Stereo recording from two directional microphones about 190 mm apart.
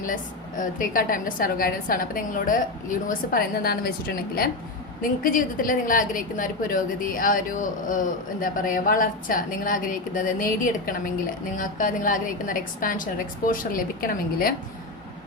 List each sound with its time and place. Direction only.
0.0 s a woman's voice: 45° left (ahead or behind)